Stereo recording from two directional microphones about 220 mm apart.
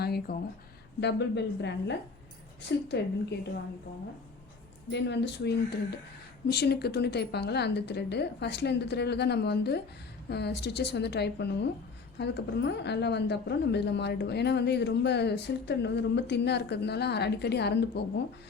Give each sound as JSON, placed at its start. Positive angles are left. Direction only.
{"t": 0.0, "sound": "a sound", "side_deg": 45}
{"t": 1.0, "sound": "a woman's voice", "side_deg": 50}
{"t": 4.9, "sound": "a woman's voice", "side_deg": 50}